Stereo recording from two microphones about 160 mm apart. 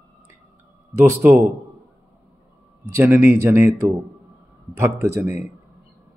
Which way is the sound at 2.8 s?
15° right (ahead or behind).